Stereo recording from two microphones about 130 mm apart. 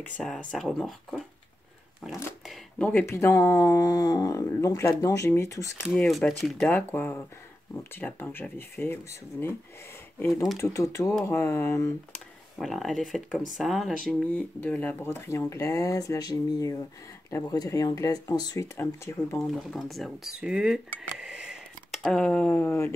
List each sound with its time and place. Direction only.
0.0 s speech: 5° left (ahead or behind)
2.4 s a sound: centre (ahead or behind)
2.9 s speech: 15° left (ahead or behind)
5.9 s speech: 5° left (ahead or behind)
6.6 s speech: 15° left (ahead or behind)
12.5 s speech: centre (ahead or behind)
14.3 s speech: 15° left (ahead or behind); by 18.7 s 30° left (ahead or behind)
19.3 s speech: centre (ahead or behind); by 22.9 s 15° left (ahead or behind)